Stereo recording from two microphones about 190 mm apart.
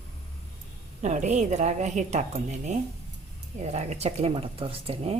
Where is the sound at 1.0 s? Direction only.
40° right (ahead or behind).